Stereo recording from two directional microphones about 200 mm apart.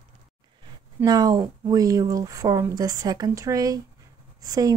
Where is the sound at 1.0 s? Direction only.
20° right (ahead or behind).